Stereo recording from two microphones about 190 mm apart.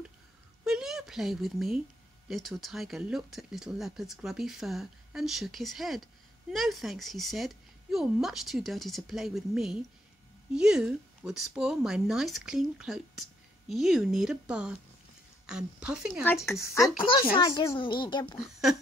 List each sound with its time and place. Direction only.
0.7 s speech: 5° right (ahead or behind)
17.0 s speech: 25° left (ahead or behind)